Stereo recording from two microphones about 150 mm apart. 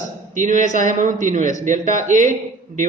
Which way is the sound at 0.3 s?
55° right (ahead or behind).